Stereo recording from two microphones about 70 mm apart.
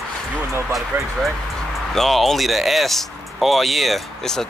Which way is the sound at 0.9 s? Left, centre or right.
Right.